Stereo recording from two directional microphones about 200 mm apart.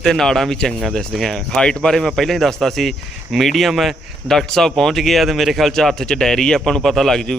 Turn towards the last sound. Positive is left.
turn(degrees=0)  # may be behind; listen again after turning